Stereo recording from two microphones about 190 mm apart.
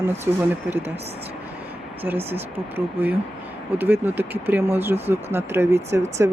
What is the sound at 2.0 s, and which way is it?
Speech, 10° right (ahead or behind).